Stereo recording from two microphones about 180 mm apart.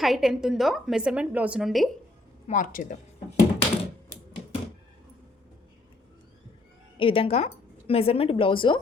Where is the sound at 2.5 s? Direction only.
45° left (ahead or behind).